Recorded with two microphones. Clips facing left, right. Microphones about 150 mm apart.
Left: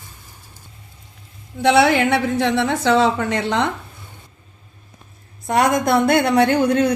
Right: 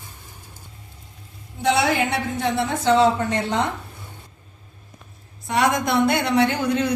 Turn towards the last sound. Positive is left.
turn(degrees=55)  # may be behind; listen again after turning